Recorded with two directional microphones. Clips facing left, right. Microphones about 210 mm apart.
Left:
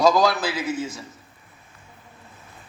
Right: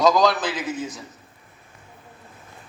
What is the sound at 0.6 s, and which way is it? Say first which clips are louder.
Speech: left 2 dB; 20° right (ahead or behind).